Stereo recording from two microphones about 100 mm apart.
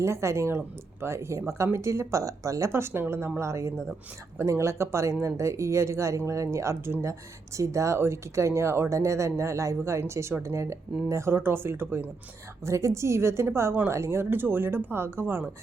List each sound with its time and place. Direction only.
0.0 s speech: 30° right (ahead or behind)